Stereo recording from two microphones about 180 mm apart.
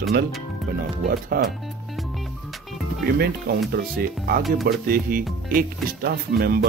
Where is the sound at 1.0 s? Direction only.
55° right (ahead or behind).